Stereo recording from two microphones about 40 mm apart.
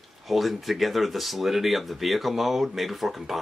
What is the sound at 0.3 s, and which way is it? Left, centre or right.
Speech, centre.